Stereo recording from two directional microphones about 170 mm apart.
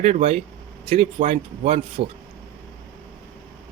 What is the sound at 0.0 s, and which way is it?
A man's voice, 40° right (ahead or behind).